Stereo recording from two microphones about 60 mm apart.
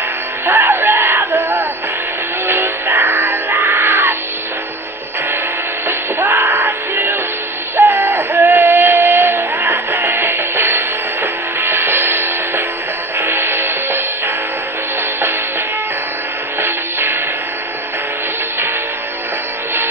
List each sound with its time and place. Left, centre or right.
0.5 s a sound: right
2.4 s music: right
5.9 s music: right
16.6 s music: right